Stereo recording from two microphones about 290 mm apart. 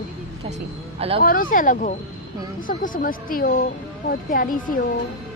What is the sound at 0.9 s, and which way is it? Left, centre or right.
Speech, centre.